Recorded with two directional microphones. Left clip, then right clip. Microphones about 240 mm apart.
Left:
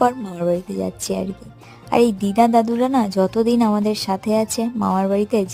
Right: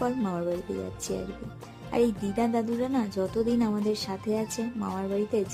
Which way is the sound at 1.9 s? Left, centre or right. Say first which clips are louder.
Left 10 dB; left.